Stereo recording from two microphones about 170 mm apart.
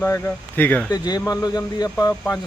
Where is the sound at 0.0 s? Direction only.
10° left (ahead or behind).